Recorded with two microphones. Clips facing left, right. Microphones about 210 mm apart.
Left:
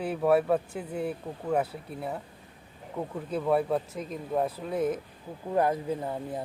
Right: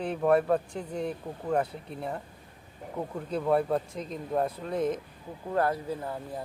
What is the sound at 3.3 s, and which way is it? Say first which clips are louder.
Speech: even; 5° left (ahead or behind).